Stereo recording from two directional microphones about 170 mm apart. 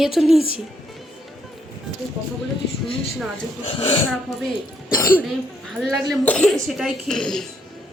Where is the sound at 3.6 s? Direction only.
35° left (ahead or behind).